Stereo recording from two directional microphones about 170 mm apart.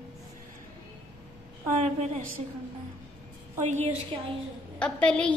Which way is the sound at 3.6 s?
45° right (ahead or behind).